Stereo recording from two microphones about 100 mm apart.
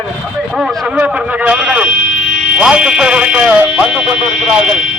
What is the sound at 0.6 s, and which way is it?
Speech, 10° right (ahead or behind).